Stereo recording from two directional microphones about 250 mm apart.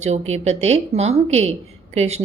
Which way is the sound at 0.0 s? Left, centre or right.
Right.